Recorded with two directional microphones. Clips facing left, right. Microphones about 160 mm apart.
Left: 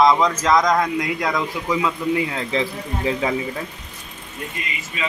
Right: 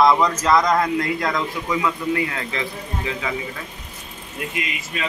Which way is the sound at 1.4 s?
20° left (ahead or behind).